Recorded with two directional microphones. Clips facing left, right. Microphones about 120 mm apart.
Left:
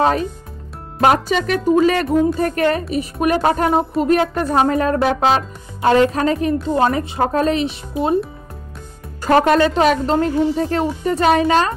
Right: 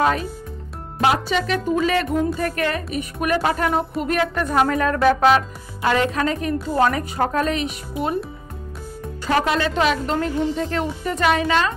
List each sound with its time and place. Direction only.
0.0 s speech: 35° left (ahead or behind)
1.0 s a woman's voice: 45° left (ahead or behind)
9.2 s speech: 45° left (ahead or behind)